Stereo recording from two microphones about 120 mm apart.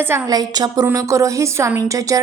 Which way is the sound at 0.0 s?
20° right (ahead or behind).